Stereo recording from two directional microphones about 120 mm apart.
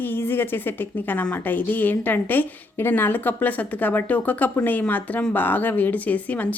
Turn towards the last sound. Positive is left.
turn(degrees=10)  # may be behind; listen again after turning